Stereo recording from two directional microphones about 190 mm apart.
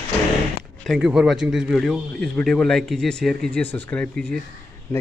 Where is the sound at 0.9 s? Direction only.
Centre (ahead or behind).